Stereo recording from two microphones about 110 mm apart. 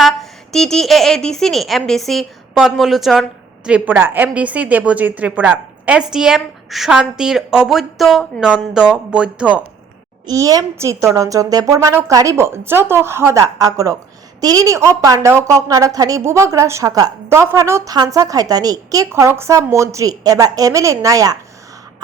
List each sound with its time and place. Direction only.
0.0 s speech: centre (ahead or behind)
3.7 s a woman's voice: 15° right (ahead or behind)
10.2 s a woman's voice: 35° right (ahead or behind)